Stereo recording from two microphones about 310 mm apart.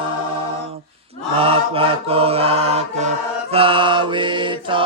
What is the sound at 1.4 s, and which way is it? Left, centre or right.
Chant, centre.